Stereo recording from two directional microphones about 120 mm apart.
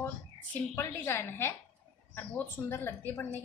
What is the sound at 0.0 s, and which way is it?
A woman's voice, 20° left (ahead or behind).